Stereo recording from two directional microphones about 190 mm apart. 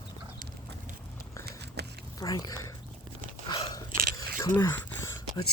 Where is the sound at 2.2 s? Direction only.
20° left (ahead or behind).